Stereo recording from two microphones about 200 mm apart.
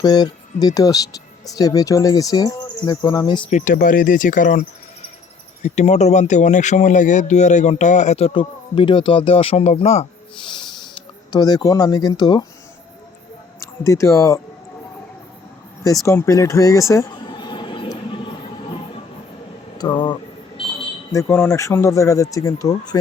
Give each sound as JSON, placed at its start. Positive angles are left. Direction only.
{"t": 0.0, "sound": "cricket", "side_deg": 20}
{"t": 3.5, "sound": "speech", "side_deg": 40}
{"t": 5.6, "sound": "speech", "side_deg": 35}
{"t": 11.3, "sound": "cricket", "side_deg": 20}
{"t": 13.6, "sound": "speech", "side_deg": 15}
{"t": 16.0, "sound": "speech", "side_deg": 15}
{"t": 19.8, "sound": "cricket", "side_deg": 25}
{"t": 21.1, "sound": "speech", "side_deg": 15}